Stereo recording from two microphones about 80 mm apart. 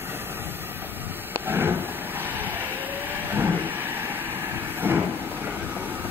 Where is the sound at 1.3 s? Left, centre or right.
Right.